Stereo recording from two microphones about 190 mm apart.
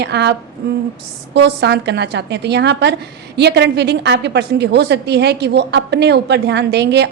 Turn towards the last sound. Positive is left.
turn(degrees=-60)  # may be behind; listen again after turning